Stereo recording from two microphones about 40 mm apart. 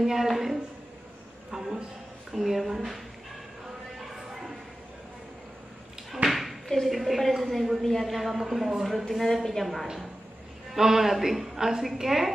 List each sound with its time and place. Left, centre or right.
0.0 s a woman's voice: centre
1.5 s a sound: centre
2.3 s a woman's voice: centre
6.2 s a woman's voice: centre
10.8 s a woman's voice: centre